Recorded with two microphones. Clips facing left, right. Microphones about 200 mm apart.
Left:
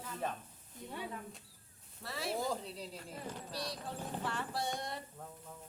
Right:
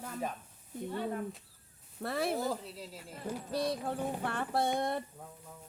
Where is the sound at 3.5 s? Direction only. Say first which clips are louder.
Right 11 dB; 55° right (ahead or behind).